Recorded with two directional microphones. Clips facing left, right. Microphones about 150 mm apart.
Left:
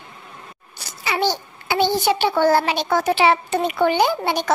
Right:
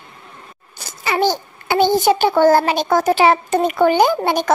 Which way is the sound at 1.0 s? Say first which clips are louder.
Right 4 dB; 45° right (ahead or behind).